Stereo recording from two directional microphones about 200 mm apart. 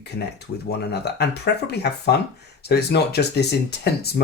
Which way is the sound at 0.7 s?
55° left (ahead or behind).